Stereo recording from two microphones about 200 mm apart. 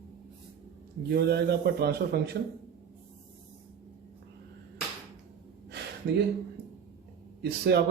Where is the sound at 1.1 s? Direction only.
55° right (ahead or behind).